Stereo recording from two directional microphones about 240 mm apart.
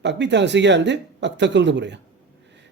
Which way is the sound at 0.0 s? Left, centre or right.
Right.